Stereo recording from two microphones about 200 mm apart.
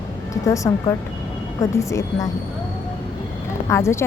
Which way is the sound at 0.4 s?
15° left (ahead or behind).